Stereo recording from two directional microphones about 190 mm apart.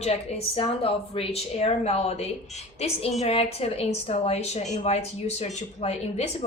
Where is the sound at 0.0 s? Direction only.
35° left (ahead or behind).